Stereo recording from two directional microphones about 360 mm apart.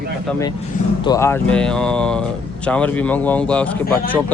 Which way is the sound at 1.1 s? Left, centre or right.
Centre.